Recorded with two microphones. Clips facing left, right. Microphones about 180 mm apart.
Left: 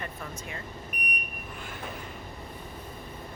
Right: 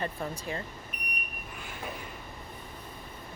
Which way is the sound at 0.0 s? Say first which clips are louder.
Right 4 dB; 35° right (ahead or behind).